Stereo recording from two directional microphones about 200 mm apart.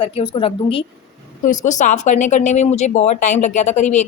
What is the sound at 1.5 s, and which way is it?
A woman's voice, 40° left (ahead or behind).